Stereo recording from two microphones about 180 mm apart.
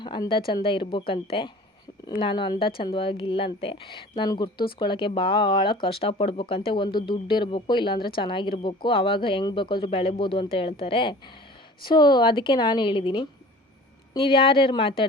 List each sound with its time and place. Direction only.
0.0 s speech: 25° left (ahead or behind)